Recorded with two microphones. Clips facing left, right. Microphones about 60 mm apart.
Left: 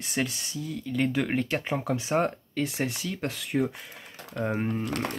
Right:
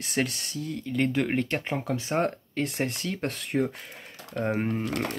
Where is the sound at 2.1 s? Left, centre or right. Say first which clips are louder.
Left 1 dB; centre.